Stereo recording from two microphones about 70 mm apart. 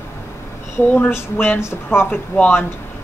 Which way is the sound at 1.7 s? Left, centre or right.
Left.